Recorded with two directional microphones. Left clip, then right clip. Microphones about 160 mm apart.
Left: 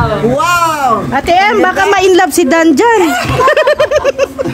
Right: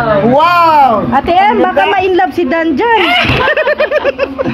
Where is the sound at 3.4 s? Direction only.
90° left.